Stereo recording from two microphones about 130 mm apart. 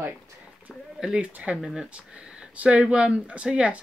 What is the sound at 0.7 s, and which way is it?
Speech, 5° right (ahead or behind).